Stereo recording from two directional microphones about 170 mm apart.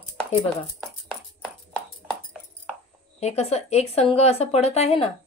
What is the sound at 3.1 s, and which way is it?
A woman's voice, 40° left (ahead or behind).